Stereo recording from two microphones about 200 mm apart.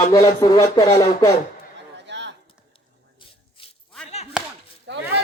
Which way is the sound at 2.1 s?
60° right (ahead or behind).